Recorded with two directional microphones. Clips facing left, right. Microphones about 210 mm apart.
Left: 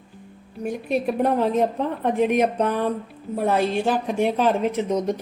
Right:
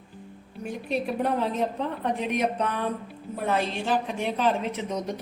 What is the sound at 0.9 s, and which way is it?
A woman's voice, 50° left (ahead or behind).